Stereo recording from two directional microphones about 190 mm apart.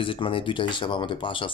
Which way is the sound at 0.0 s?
25° left (ahead or behind).